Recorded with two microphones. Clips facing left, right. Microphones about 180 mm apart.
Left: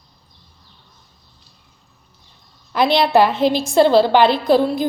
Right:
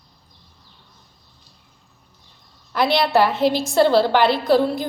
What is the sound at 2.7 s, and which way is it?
A woman's voice, 20° left (ahead or behind).